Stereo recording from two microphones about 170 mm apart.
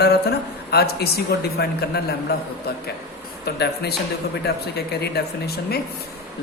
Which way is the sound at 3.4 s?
70° left (ahead or behind).